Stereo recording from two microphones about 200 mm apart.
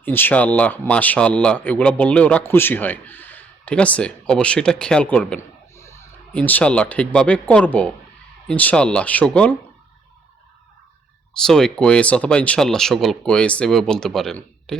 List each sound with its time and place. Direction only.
0.0 s speech: 10° left (ahead or behind)
11.3 s speech: 5° left (ahead or behind)